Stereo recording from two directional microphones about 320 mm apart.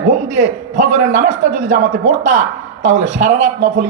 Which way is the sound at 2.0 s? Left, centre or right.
Right.